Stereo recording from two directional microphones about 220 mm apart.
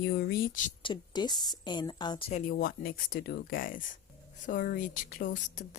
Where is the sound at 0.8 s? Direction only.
20° left (ahead or behind).